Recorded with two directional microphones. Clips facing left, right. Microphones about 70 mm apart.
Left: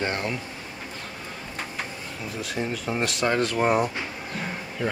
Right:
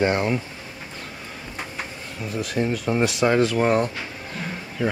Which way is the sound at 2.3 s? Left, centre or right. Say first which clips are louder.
Right 6 dB; centre.